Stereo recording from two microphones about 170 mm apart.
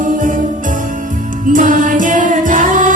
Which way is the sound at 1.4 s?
50° right (ahead or behind).